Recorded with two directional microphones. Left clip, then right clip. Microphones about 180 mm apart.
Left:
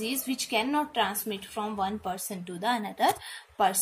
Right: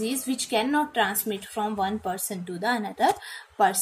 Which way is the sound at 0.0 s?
Centre (ahead or behind).